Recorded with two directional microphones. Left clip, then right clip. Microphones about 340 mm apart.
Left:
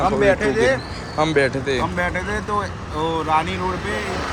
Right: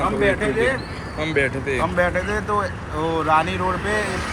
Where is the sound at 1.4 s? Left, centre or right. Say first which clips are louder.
Right 1 dB; left.